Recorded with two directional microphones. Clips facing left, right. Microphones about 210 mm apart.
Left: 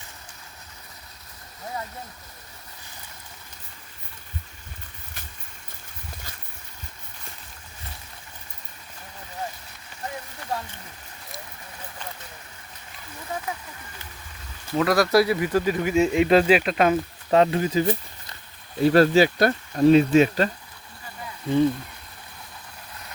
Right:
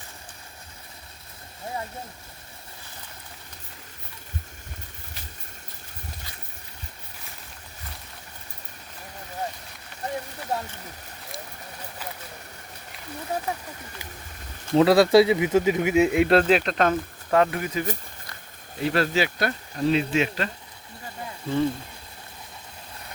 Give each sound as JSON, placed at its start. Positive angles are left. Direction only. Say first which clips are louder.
{"t": 13.3, "sound": "a sound", "louder": "right 3 dB", "side_deg": -35}
{"t": 14.7, "sound": "speech", "louder": "right 4 dB", "side_deg": -30}
{"t": 17.3, "sound": "speech", "louder": "left 3 dB", "side_deg": 25}
{"t": 18.8, "sound": "speech", "louder": "left 7 dB", "side_deg": 40}